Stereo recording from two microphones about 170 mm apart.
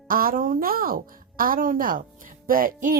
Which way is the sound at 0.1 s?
55° right (ahead or behind).